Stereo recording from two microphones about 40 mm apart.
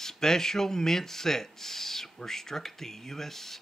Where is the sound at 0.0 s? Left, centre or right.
Centre.